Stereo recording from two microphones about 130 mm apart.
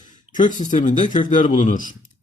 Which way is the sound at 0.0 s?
80° left.